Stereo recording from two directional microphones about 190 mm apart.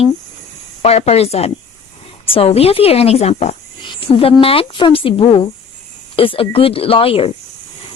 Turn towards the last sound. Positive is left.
turn(degrees=30)  # may be behind; listen again after turning